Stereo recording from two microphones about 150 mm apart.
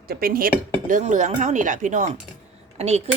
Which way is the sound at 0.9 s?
60° right (ahead or behind).